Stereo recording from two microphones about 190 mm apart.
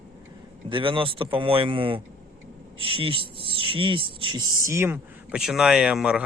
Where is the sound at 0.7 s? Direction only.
25° right (ahead or behind).